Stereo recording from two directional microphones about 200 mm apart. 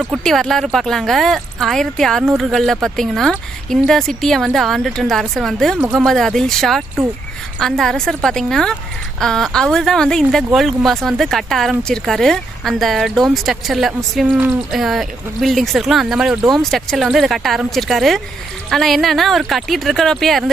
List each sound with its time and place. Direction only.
0.0 s speech: centre (ahead or behind)